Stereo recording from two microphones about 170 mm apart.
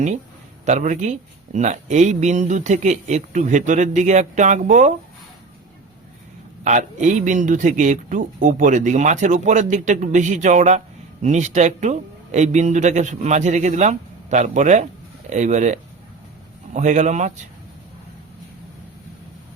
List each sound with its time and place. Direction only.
0.6 s speech: 45° right (ahead or behind)
6.7 s speech: 45° right (ahead or behind)